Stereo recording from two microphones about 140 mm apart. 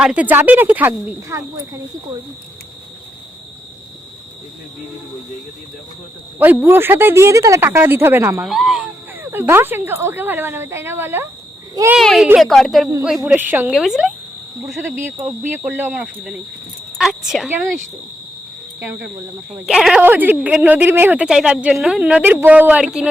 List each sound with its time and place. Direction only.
0.0 s speech: 10° right (ahead or behind)
6.4 s speech: 15° right (ahead or behind)
8.4 s a sound: centre (ahead or behind)
9.2 s speech: 15° right (ahead or behind)
11.9 s speech: centre (ahead or behind)
13.2 s speech: 10° right (ahead or behind)
14.8 s speech: 15° right (ahead or behind)
18.8 s speech: 15° right (ahead or behind)
19.5 s speech: 5° right (ahead or behind)